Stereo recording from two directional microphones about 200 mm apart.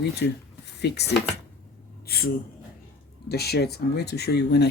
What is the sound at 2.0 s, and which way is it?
Gasp, 50° left (ahead or behind).